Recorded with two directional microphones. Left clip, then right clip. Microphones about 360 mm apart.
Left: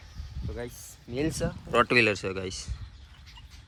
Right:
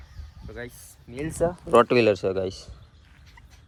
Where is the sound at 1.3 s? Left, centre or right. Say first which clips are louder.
Right 8 dB; centre.